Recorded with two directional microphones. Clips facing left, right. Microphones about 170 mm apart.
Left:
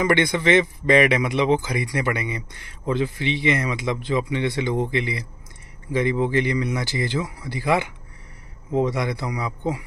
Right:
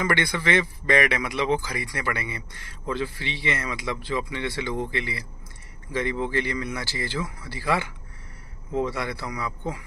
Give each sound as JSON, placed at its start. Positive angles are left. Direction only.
{"t": 0.0, "sound": "speech", "side_deg": 20}